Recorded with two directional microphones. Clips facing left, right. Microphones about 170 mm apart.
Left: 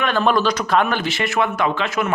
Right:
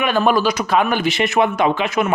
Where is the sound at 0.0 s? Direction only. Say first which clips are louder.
Right 2 dB; 10° right (ahead or behind).